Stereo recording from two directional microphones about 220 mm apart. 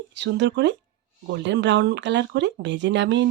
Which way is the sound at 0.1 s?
55° right (ahead or behind).